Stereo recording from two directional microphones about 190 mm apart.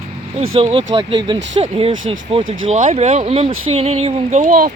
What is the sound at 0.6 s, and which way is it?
Speech, 30° right (ahead or behind).